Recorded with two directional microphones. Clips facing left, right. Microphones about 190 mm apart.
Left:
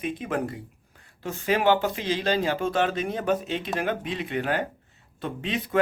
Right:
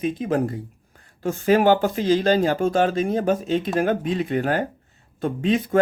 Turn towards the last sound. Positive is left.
turn(degrees=-45)  # may be behind; listen again after turning